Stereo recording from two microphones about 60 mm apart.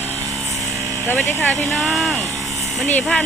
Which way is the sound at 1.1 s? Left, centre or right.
Left.